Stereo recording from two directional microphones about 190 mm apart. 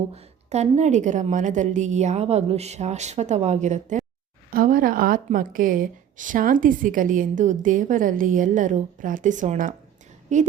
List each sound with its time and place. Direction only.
0.1 s a woman's voice: 35° right (ahead or behind)